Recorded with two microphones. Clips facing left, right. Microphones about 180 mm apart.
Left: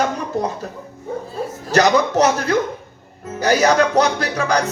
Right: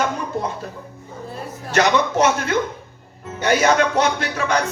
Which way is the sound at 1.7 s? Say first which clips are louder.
Left 3 dB; 35° left (ahead or behind).